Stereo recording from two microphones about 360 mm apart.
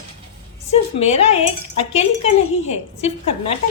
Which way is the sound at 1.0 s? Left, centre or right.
Centre.